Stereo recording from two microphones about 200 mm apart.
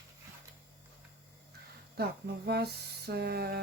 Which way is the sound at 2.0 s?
50° right (ahead or behind).